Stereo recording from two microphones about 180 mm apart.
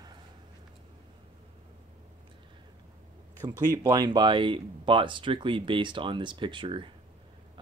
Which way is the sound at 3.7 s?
20° right (ahead or behind).